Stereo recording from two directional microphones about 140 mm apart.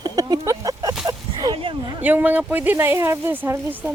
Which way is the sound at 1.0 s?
30° right (ahead or behind).